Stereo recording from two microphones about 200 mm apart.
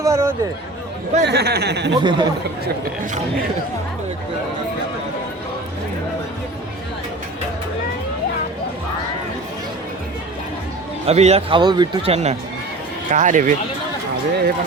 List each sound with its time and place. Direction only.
0.0 s speech: 15° right (ahead or behind)
1.2 s speech: 55° right (ahead or behind)
2.0 s speech: 20° right (ahead or behind)
11.0 s speech: 30° right (ahead or behind)